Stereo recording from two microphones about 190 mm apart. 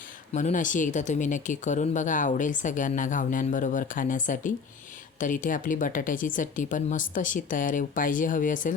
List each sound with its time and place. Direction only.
0.3 s speech: 40° left (ahead or behind)